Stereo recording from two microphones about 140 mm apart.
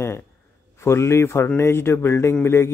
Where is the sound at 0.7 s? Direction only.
20° left (ahead or behind).